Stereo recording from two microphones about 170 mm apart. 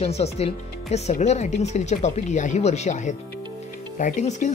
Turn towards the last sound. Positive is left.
turn(degrees=45)  # may be behind; listen again after turning